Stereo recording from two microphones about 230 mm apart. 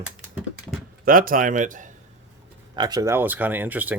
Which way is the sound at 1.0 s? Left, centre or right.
Right.